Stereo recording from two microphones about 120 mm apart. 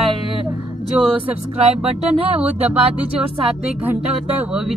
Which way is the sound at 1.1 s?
50° right (ahead or behind).